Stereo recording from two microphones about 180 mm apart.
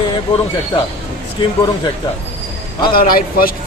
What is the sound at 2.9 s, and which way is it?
Speech, 55° left (ahead or behind).